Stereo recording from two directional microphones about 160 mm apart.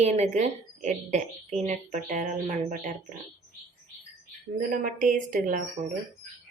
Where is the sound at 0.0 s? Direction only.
45° right (ahead or behind).